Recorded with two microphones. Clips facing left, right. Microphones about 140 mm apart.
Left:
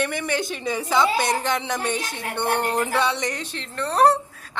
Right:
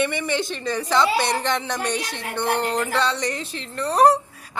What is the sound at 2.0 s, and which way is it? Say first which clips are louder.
Speech: even; 50° left (ahead or behind).